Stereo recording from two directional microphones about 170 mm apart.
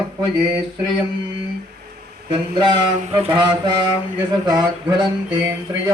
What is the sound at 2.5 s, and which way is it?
Music, 25° right (ahead or behind).